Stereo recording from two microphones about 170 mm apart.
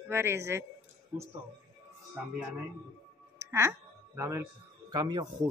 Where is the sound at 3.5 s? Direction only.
15° right (ahead or behind).